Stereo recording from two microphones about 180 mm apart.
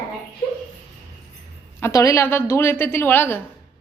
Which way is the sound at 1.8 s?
15° left (ahead or behind).